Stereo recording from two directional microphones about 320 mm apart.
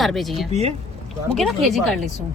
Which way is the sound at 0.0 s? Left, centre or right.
Centre.